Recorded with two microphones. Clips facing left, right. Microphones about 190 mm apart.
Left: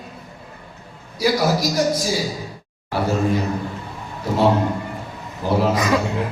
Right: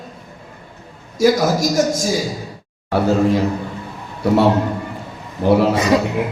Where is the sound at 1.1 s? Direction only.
45° right (ahead or behind).